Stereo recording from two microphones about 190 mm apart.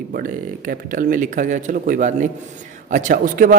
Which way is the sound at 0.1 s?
50° right (ahead or behind).